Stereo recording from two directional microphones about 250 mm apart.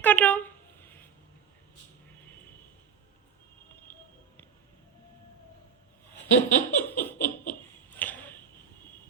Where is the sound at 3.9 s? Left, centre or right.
Centre.